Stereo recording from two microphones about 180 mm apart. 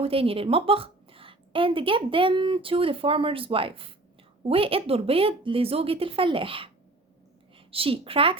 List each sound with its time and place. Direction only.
0.0 s a woman's voice: 30° right (ahead or behind)
7.7 s speech: 30° right (ahead or behind)